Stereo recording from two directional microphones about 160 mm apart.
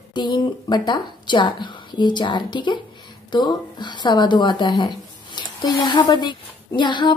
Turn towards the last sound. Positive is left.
turn(degrees=30)  # may be behind; listen again after turning